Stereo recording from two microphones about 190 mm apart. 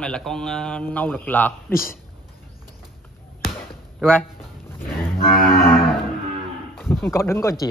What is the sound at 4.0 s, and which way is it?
Speech, 10° left (ahead or behind).